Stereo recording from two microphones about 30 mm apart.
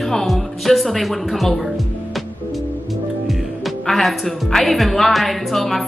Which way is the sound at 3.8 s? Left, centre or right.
Centre.